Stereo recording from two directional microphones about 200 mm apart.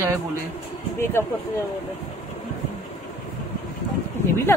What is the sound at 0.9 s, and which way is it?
Speech, 10° left (ahead or behind).